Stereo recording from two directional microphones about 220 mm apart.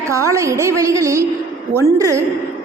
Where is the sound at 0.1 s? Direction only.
15° right (ahead or behind).